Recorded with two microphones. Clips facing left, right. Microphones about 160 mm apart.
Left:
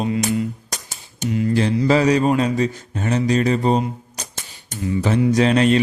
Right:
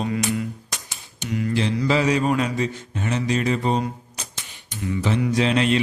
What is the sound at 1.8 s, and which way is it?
Speech, 40° left (ahead or behind).